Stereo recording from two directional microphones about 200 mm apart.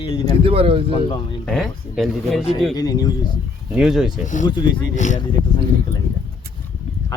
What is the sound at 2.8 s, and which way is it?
Speech, 20° left (ahead or behind).